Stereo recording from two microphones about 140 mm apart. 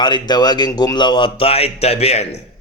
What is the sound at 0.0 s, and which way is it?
Speech, 30° left (ahead or behind).